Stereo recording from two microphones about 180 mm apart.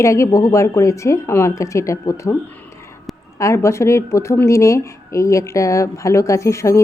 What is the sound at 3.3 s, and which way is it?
Speech, 15° left (ahead or behind).